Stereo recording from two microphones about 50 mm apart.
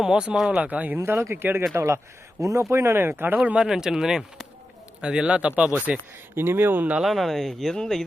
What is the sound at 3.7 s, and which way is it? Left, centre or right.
A man's voice, centre.